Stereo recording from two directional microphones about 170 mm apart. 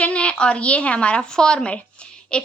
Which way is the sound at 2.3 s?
5° left (ahead or behind).